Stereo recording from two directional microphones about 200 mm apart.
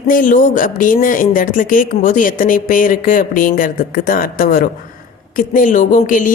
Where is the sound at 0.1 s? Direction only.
40° left (ahead or behind).